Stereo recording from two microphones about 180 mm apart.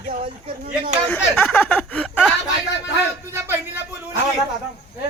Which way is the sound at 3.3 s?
10° right (ahead or behind).